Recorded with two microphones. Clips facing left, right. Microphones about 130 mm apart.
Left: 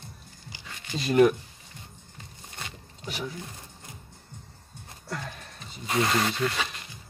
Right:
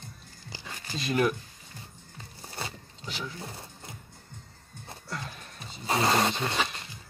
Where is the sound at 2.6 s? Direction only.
35° right (ahead or behind).